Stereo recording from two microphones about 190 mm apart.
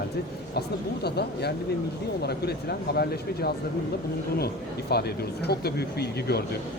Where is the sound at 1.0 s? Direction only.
60° left (ahead or behind).